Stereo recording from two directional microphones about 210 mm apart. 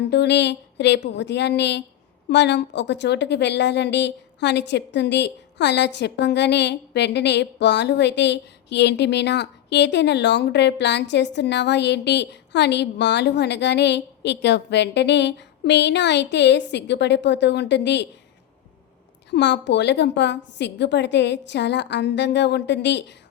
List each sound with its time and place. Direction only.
0.1 s a woman's voice: 55° left (ahead or behind)
19.3 s a woman's voice: 55° left (ahead or behind)